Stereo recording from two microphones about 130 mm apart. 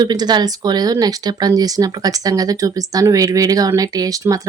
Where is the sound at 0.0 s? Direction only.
30° right (ahead or behind).